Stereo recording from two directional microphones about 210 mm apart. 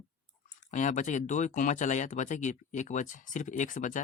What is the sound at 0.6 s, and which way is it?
Speech, 35° left (ahead or behind).